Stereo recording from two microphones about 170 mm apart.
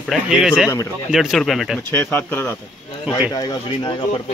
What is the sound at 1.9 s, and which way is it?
Speech, 10° left (ahead or behind).